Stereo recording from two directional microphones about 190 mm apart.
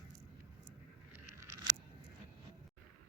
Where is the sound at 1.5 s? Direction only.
20° right (ahead or behind).